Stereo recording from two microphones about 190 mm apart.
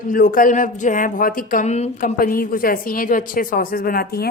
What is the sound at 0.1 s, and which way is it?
Speech, 45° left (ahead or behind).